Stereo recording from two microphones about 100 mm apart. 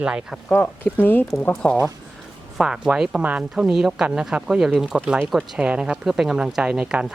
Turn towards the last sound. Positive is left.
turn(degrees=-10)  # may be behind; listen again after turning